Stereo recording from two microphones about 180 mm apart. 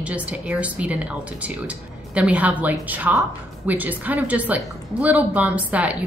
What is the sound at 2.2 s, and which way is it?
A woman's voice, 10° right (ahead or behind).